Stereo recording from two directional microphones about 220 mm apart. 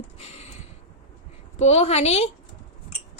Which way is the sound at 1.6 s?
30° left (ahead or behind).